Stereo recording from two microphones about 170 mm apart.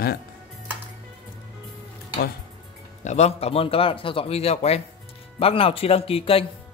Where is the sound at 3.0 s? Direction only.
40° left (ahead or behind).